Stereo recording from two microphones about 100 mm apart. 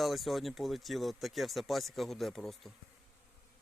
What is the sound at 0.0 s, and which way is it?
Speech, centre (ahead or behind).